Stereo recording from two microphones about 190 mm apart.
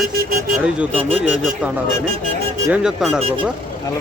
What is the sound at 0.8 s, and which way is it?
Speech, 5° right (ahead or behind).